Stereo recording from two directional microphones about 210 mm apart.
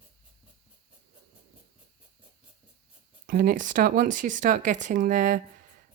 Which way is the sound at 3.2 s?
40° right (ahead or behind).